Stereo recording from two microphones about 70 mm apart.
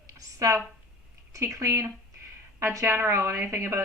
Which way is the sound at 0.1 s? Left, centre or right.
Right.